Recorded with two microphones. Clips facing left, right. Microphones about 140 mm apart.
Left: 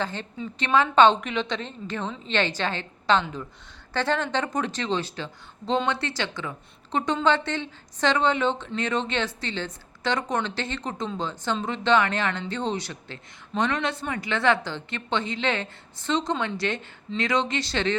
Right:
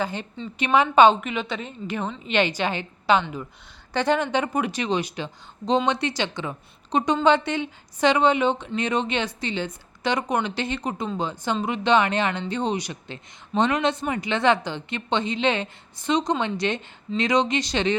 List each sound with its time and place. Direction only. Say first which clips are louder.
0.0 s speech: right 2 dB; 15° right (ahead or behind)